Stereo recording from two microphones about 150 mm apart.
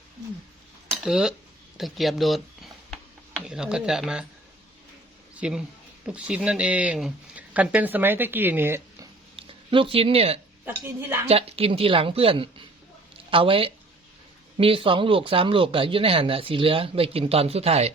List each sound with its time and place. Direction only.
1.0 s speech: 5° right (ahead or behind)
5.4 s speech: 5° right (ahead or behind)
9.3 s speech: 35° right (ahead or behind)